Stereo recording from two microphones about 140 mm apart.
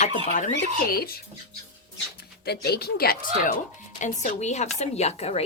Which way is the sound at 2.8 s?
90° left.